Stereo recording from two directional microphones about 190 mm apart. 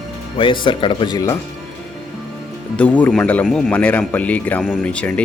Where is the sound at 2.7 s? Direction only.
10° left (ahead or behind).